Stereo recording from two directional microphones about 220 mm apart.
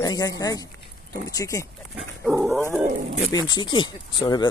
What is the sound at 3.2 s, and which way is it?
Speech, 20° left (ahead or behind).